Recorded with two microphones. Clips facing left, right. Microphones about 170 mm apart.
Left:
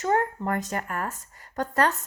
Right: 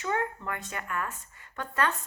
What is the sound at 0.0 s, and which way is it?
Speech, 40° left (ahead or behind).